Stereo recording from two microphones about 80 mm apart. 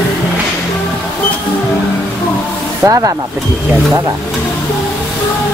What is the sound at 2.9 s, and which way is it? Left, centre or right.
Speech, right.